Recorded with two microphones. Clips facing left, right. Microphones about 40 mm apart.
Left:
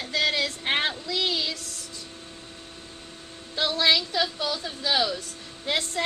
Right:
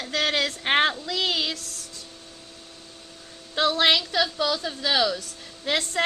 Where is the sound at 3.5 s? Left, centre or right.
Right.